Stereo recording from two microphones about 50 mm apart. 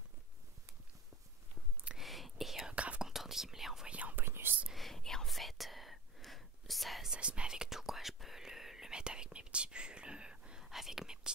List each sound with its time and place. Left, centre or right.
2.0 s whispering: centre
2.7 s whispering: right
3.1 s whispering: centre
3.9 s whispering: right
4.2 s whispering: right
4.7 s whispering: centre
7.1 s whispering: right
7.8 s whispering: centre; by 10.6 s right
10.6 s whispering: centre